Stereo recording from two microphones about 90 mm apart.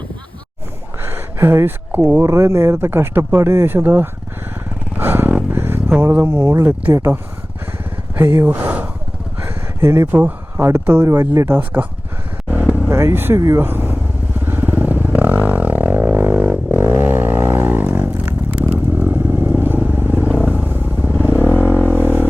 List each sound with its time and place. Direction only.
1.0 s speech: 25° right (ahead or behind)
2.2 s speech: 30° right (ahead or behind)
4.9 s a sound: 20° right (ahead or behind)
6.0 s speech: 25° right (ahead or behind)
12.5 s vehicle: 20° right (ahead or behind)
12.9 s speech: 30° right (ahead or behind)
13.6 s motorcycle: 20° right (ahead or behind)
21.1 s vehicle: 20° right (ahead or behind)
21.7 s a sound: 15° right (ahead or behind)
22.0 s vehicle: 20° right (ahead or behind)